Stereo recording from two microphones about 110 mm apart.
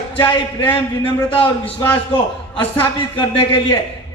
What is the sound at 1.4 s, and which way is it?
Speech, 15° left (ahead or behind).